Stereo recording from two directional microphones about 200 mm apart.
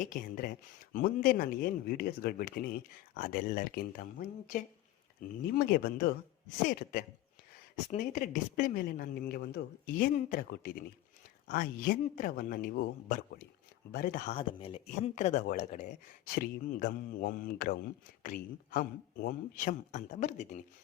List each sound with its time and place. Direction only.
0.0 s speech: 45° left (ahead or behind)
7.9 s speech: 40° left (ahead or behind)
14.3 s speech: 30° left (ahead or behind)